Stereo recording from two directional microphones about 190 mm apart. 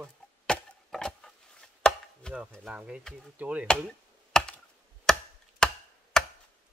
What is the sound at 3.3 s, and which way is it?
Chop, 10° right (ahead or behind).